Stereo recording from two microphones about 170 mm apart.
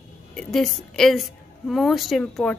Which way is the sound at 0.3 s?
5° left (ahead or behind).